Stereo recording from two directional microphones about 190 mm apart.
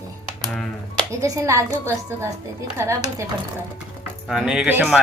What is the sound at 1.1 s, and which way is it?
A woman's voice, 15° right (ahead or behind).